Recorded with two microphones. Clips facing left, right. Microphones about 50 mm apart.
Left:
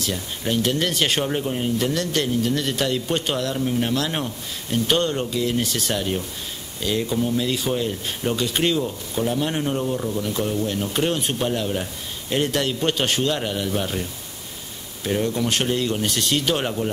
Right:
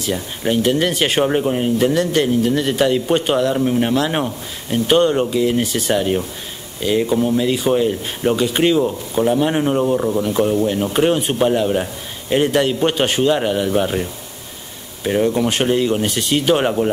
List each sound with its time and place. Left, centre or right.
0.0 s speech: centre
3.5 s speech: right
15.0 s speech: centre